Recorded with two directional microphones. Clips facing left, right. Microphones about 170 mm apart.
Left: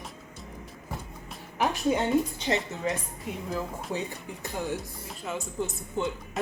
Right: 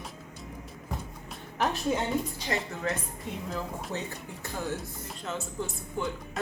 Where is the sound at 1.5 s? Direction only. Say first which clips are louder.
Left 2 dB; 10° left (ahead or behind).